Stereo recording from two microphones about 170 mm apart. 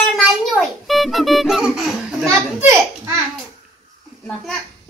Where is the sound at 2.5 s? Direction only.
15° right (ahead or behind).